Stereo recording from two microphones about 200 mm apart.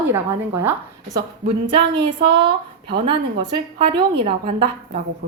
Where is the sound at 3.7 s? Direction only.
25° right (ahead or behind).